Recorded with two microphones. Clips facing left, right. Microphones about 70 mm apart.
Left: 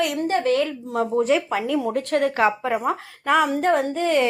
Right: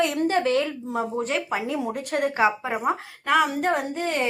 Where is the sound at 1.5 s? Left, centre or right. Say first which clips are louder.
Left 4 dB; right.